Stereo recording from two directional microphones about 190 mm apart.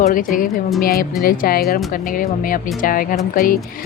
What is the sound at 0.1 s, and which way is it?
Speech, 45° left (ahead or behind).